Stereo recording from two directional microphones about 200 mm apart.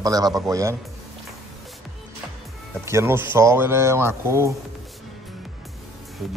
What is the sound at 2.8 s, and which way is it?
A man's voice, 15° right (ahead or behind).